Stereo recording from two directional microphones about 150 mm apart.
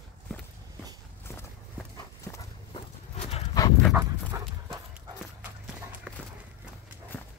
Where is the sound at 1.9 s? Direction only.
20° left (ahead or behind).